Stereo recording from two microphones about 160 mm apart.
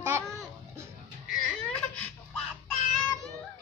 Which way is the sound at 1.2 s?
5° left (ahead or behind).